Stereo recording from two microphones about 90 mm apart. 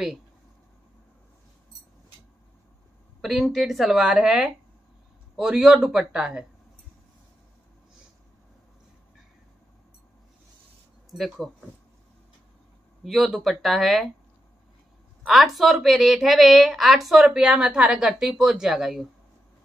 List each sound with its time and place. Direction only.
3.2 s a woman's voice: centre (ahead or behind)
11.1 s speech: centre (ahead or behind)
13.0 s a woman's voice: centre (ahead or behind)
15.2 s a woman's voice: centre (ahead or behind)